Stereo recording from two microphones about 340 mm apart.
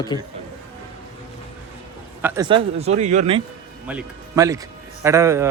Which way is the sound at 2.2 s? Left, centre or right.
Centre.